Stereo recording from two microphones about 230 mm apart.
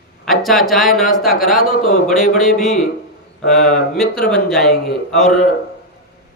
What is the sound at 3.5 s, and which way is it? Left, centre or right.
Speech, left.